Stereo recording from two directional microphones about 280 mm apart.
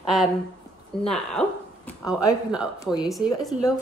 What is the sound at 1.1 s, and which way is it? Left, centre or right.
A woman's voice, centre.